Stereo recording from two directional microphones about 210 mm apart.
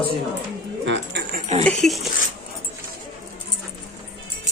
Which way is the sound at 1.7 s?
Centre (ahead or behind).